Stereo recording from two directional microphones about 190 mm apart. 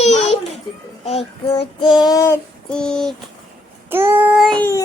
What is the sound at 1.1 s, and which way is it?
Child singing, 30° left (ahead or behind).